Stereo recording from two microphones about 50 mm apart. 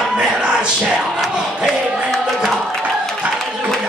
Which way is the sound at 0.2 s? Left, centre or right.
Centre.